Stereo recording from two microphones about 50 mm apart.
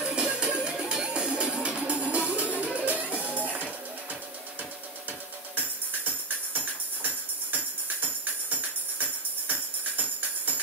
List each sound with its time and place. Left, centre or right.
0.0 s music: centre
8.5 s music: right